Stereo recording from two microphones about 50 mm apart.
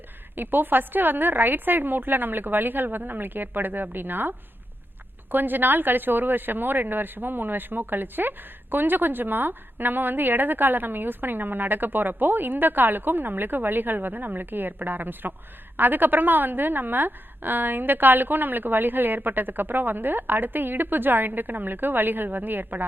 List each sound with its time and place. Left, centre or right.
0.3 s speech: right